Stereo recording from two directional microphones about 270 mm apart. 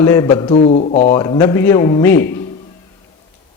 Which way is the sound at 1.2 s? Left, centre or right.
Centre.